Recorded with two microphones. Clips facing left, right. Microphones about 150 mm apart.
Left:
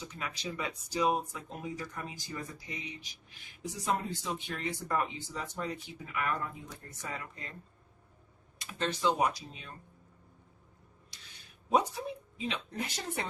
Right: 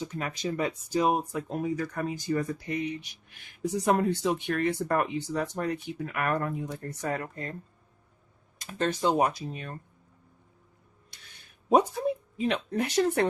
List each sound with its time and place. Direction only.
0.0 s speech: 50° right (ahead or behind)
8.5 s speech: 45° right (ahead or behind)
11.1 s a sound: 55° right (ahead or behind)
11.7 s a woman's voice: 55° right (ahead or behind); by 13.2 s 70° right (ahead or behind)